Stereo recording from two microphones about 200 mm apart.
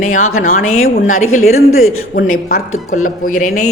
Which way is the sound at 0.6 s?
90° left.